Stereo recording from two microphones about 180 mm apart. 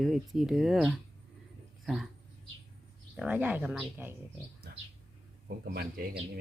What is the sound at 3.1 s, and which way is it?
Speech, 5° right (ahead or behind).